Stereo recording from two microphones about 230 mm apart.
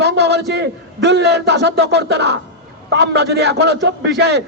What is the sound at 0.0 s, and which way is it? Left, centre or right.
A man's voice, right.